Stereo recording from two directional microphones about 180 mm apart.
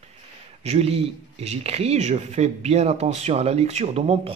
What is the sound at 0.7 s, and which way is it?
Speech, 35° right (ahead or behind).